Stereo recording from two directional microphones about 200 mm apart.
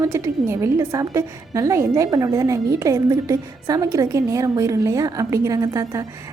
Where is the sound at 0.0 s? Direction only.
15° right (ahead or behind).